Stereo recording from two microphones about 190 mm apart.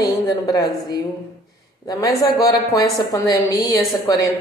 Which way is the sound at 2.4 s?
20° left (ahead or behind).